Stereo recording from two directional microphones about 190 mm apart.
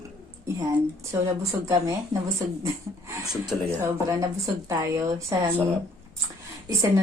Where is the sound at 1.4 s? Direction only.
15° right (ahead or behind).